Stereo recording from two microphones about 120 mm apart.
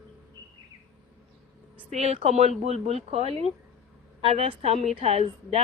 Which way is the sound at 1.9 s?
60° right (ahead or behind).